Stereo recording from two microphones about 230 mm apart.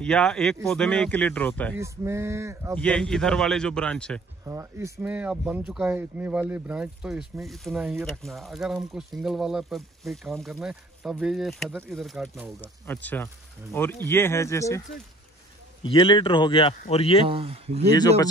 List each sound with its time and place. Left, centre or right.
0.0 s speech: centre
1.8 s male singing: centre
2.7 s speech: centre
4.5 s speech: centre
15.8 s a man's voice: left
17.3 s speech: right